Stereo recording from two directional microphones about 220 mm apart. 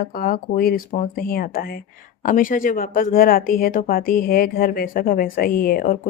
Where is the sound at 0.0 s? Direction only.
40° left (ahead or behind).